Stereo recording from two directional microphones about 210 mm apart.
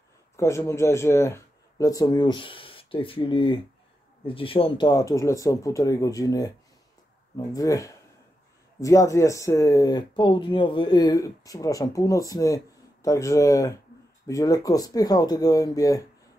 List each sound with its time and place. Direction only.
0.4 s speech: 15° left (ahead or behind)